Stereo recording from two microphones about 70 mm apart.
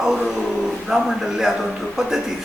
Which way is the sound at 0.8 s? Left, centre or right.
Centre.